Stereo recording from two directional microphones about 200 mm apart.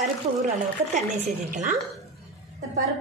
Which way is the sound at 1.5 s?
40° right (ahead or behind).